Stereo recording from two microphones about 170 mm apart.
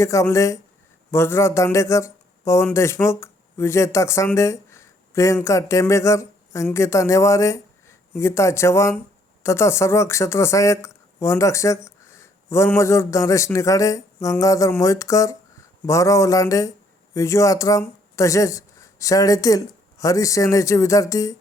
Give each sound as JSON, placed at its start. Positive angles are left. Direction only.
{"t": 0.0, "sound": "speech", "side_deg": 15}